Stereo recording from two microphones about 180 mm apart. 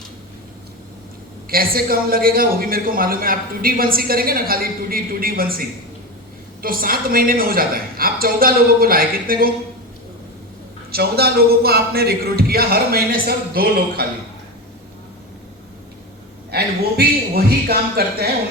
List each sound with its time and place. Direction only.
1.5 s a man's voice: 55° right (ahead or behind)
10.9 s a man's voice: 60° right (ahead or behind)
16.5 s a man's voice: 60° right (ahead or behind)